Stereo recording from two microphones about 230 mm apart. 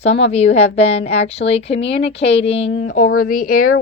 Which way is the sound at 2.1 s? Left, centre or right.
Left.